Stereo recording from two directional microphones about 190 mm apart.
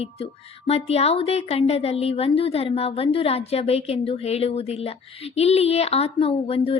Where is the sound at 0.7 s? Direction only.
35° left (ahead or behind).